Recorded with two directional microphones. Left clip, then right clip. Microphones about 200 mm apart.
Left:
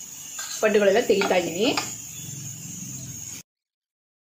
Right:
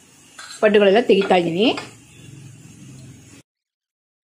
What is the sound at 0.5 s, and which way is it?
Speech, 40° right (ahead or behind).